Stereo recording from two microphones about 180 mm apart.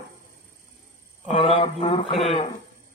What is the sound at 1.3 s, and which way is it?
Speech, 30° left (ahead or behind).